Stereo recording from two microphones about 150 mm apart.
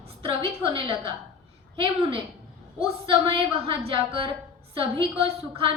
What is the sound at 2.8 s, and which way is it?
A woman's voice, 35° right (ahead or behind).